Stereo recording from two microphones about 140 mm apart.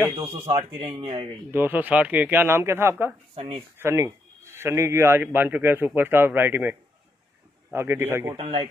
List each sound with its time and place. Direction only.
0.1 s speech: 40° right (ahead or behind)
1.5 s a man's voice: 15° right (ahead or behind)
3.3 s speech: 45° right (ahead or behind)
3.7 s a man's voice: 20° right (ahead or behind)
8.4 s speech: 40° right (ahead or behind)